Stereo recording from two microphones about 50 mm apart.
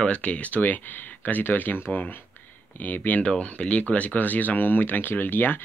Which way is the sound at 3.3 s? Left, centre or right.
Left.